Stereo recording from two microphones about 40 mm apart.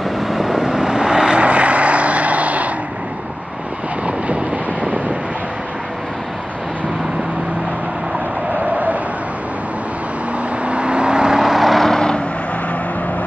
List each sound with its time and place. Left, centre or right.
0.3 s vehicle: centre; by 2.7 s right
10.7 s vehicle: right; by 11.9 s centre
11.9 s vehicle: centre